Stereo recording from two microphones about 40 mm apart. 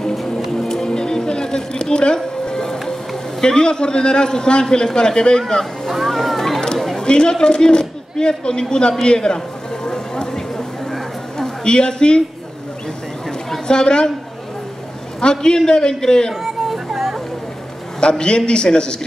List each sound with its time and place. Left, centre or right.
0.4 s music: centre
2.9 s a man's voice: centre
5.5 s a sound: centre
7.0 s a man's voice: left
9.8 s a sound: centre
13.7 s a man's voice: left
15.1 s a man's voice: left
16.6 s vehicle: centre
18.0 s a man's voice: left